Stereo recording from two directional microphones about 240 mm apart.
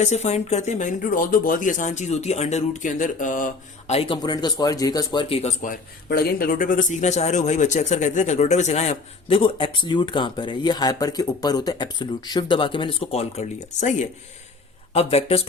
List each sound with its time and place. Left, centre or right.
0.0 s a man's voice: left
6.1 s a man's voice: left
14.9 s a man's voice: left